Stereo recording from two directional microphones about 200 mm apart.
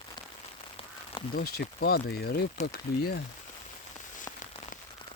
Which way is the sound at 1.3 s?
50° left (ahead or behind).